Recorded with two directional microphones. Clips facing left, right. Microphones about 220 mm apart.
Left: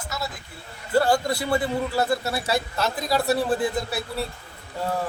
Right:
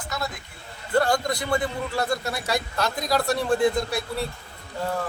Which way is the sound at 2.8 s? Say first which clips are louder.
Even; 5° left (ahead or behind).